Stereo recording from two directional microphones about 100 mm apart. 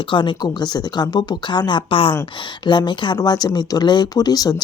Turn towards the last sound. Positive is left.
turn(degrees=40)  # may be behind; listen again after turning